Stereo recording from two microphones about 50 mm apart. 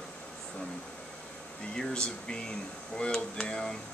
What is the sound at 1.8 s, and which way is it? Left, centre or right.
Speech, centre.